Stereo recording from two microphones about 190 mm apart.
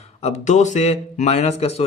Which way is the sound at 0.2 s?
35° left (ahead or behind).